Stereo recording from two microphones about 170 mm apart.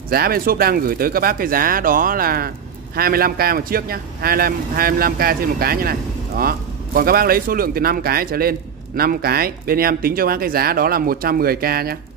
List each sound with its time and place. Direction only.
0.1 s a man's voice: 60° right (ahead or behind)